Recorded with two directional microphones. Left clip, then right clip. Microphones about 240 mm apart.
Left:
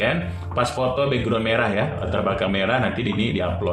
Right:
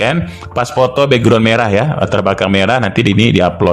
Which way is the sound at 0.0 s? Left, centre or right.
Right.